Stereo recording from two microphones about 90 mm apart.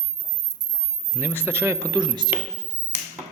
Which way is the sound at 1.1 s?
25° right (ahead or behind).